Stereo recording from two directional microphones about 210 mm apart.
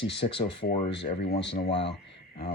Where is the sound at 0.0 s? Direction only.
25° left (ahead or behind).